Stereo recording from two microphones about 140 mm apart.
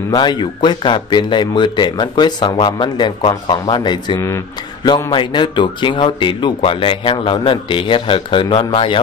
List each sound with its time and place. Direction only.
0.1 s speech: 30° left (ahead or behind)